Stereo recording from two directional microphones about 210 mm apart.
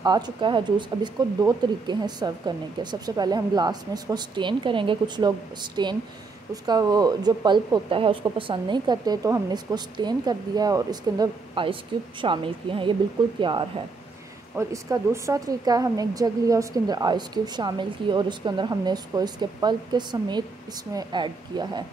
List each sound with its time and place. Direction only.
0.0 s speech: 20° right (ahead or behind)